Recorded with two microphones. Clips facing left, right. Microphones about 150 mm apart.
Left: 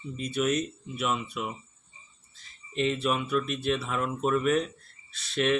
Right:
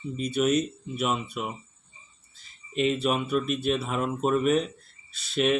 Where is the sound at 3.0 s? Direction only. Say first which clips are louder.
Right 2 dB; 25° right (ahead or behind).